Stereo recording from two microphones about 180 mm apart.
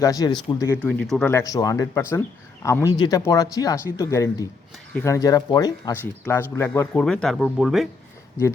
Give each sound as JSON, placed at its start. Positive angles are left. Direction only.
{"t": 0.0, "sound": "speech", "side_deg": 20}
{"t": 0.8, "sound": "speech", "side_deg": 5}
{"t": 1.3, "sound": "speech", "side_deg": 15}